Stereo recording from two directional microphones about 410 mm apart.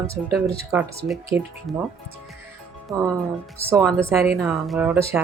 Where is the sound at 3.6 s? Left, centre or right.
Centre.